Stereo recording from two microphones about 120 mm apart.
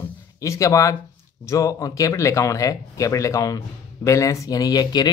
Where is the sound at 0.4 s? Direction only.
25° left (ahead or behind).